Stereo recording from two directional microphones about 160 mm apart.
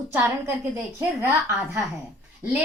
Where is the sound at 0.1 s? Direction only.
15° right (ahead or behind).